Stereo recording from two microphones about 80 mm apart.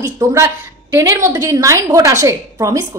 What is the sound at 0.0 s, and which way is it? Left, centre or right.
A woman's voice, right.